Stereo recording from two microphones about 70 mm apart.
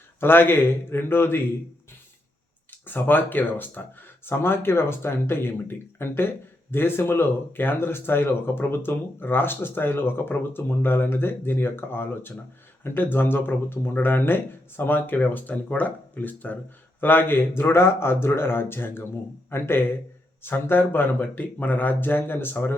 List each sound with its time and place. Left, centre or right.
0.2 s speech: left
2.6 s speech: left